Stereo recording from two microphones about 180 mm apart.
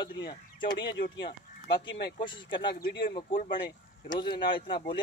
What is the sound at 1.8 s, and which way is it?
Speech, 70° left (ahead or behind).